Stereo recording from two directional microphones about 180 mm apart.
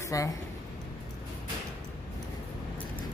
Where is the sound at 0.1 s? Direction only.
20° left (ahead or behind).